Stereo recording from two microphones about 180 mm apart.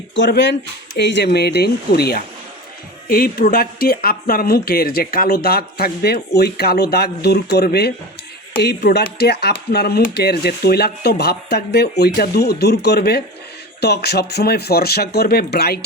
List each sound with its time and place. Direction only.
0.2 s speech: 80° left; by 15.8 s 60° left (ahead or behind)